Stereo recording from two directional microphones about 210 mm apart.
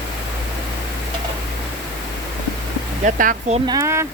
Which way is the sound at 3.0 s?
40° right (ahead or behind).